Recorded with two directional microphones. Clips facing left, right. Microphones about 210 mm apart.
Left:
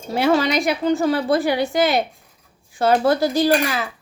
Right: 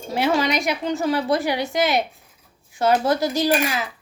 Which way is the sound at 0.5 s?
35° left (ahead or behind).